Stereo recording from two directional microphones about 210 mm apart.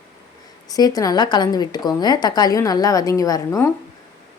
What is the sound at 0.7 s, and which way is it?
Speech, 15° left (ahead or behind).